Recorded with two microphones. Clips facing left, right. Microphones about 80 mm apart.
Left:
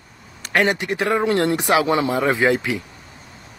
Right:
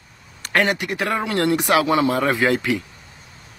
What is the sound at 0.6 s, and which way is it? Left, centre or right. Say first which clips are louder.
Speech: left 2 dB; left.